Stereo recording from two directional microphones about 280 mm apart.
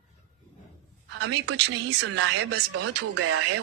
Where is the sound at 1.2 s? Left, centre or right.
Right.